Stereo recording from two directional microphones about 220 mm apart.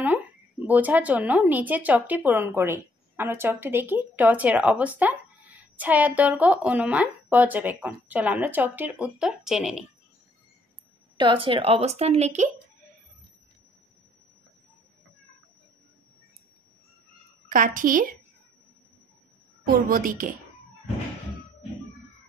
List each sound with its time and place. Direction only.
0.7 s speech: 5° right (ahead or behind)
11.1 s a woman's voice: 20° right (ahead or behind)
17.5 s a woman's voice: 35° right (ahead or behind)
19.7 s a woman's voice: 40° right (ahead or behind)